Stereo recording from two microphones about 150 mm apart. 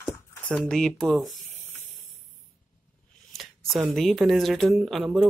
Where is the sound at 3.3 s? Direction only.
Centre (ahead or behind).